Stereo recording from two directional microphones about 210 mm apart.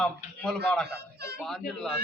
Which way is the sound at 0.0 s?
5° left (ahead or behind).